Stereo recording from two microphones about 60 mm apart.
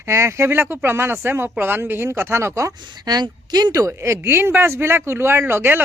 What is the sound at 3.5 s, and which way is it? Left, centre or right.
Speech, right.